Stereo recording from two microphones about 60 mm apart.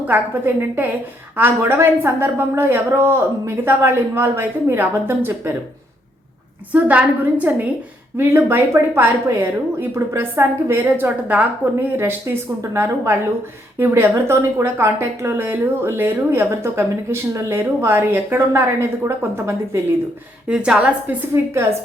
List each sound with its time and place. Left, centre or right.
0.1 s a woman's voice: right
6.7 s a woman's voice: right
8.2 s a woman's voice: right
11.3 s a woman's voice: right
11.9 s a woman's voice: right
20.5 s a woman's voice: centre